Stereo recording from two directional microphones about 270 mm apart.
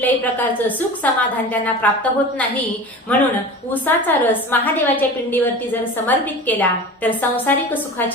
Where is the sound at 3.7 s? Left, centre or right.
Centre.